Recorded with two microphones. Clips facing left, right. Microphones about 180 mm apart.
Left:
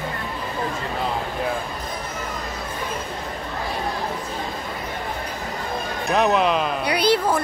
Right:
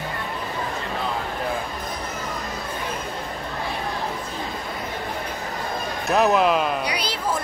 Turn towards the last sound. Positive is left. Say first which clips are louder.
# left 7 dB
turn(degrees=60)  # may be behind; listen again after turning